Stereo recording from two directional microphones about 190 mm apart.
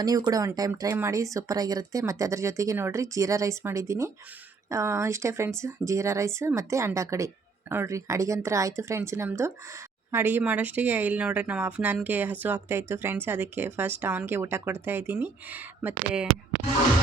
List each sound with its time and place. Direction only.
0.0 s speech: 20° right (ahead or behind)